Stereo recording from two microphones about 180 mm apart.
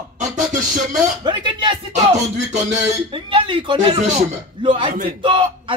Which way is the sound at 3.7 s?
40° right (ahead or behind).